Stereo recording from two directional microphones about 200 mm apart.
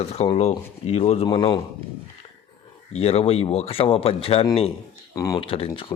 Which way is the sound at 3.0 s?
30° left (ahead or behind).